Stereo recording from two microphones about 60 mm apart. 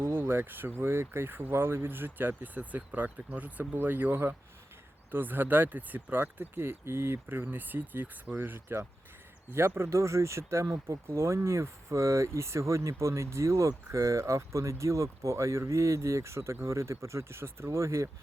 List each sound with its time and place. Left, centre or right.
0.0 s speech: right